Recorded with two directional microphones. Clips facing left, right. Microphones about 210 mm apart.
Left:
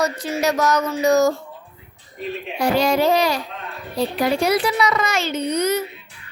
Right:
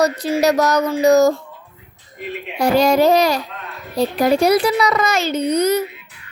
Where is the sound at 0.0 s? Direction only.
35° right (ahead or behind).